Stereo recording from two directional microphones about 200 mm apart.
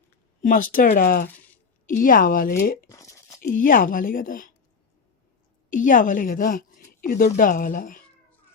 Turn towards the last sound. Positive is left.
turn(degrees=40)  # may be behind; listen again after turning